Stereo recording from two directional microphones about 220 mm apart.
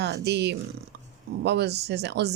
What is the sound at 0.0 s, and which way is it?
Speech, 50° right (ahead or behind).